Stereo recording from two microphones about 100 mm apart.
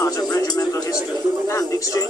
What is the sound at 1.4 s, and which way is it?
Speech, 35° left (ahead or behind).